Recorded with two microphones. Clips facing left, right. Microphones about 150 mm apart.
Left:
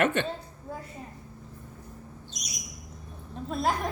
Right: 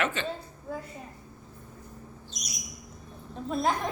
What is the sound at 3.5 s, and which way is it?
Speech, 5° left (ahead or behind).